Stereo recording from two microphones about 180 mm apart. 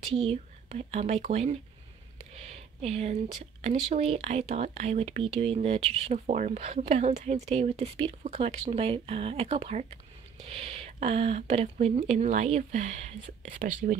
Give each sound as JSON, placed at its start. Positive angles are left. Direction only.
{"t": 0.1, "sound": "speech", "side_deg": -35}
{"t": 2.3, "sound": "a sound", "side_deg": -35}
{"t": 3.9, "sound": "speech", "side_deg": -35}